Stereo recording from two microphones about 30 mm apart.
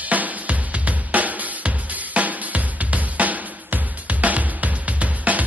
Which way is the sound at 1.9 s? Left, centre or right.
Right.